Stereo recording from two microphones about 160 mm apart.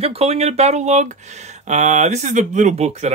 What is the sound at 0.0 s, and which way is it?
Speech, 40° right (ahead or behind).